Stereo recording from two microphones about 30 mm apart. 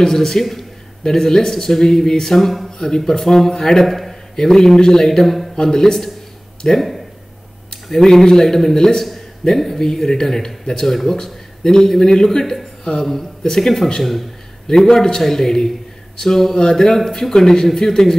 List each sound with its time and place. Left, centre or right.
0.0 s a man's voice: centre
3.8 s a sound: centre
4.4 s a man's voice: centre
5.2 s a man's voice: centre
5.6 s a man's voice: centre
6.7 s a man's voice: centre
7.7 s a man's voice: centre
14.9 s a man's voice: centre